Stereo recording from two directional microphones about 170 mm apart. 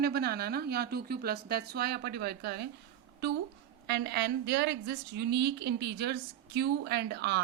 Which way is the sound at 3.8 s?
85° right.